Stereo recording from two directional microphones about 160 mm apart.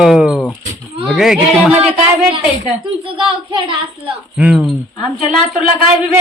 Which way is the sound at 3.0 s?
35° right (ahead or behind).